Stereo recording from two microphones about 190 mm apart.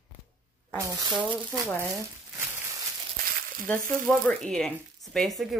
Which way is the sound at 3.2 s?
50° right (ahead or behind).